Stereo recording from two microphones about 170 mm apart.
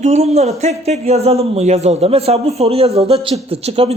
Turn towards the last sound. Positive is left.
turn(degrees=-35)  # may be behind; listen again after turning